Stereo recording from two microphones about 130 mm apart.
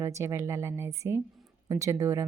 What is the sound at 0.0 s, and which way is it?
Speech, 20° right (ahead or behind).